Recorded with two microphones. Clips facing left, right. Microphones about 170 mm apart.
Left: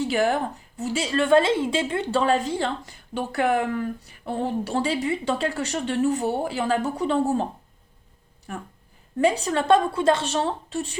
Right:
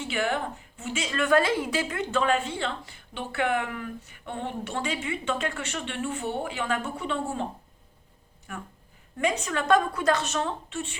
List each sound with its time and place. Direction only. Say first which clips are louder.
0.0 s a woman's voice: left 6 dB; 40° left (ahead or behind)
8.5 s a woman's voice: left 4 dB; 30° left (ahead or behind)